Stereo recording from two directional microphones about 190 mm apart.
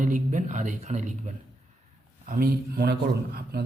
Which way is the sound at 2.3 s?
55° right (ahead or behind).